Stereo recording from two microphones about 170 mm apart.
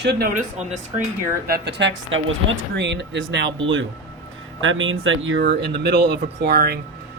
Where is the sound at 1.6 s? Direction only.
90° right.